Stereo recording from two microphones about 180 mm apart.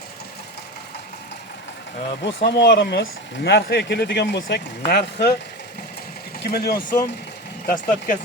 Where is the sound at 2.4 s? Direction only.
65° left (ahead or behind).